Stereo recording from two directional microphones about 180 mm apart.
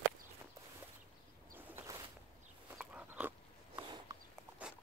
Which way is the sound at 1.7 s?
20° right (ahead or behind).